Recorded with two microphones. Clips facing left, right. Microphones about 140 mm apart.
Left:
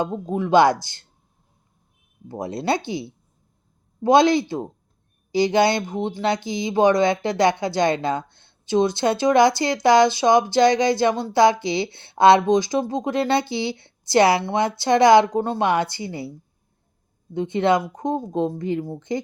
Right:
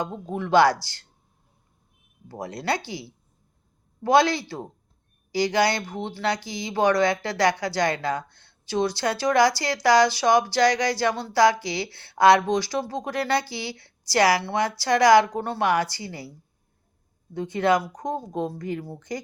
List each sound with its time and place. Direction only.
0.0 s speech: 20° left (ahead or behind)
2.2 s speech: 20° left (ahead or behind)
17.3 s speech: 25° left (ahead or behind)